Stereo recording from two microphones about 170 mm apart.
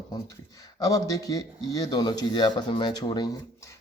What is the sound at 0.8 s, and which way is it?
A man's voice, 20° left (ahead or behind).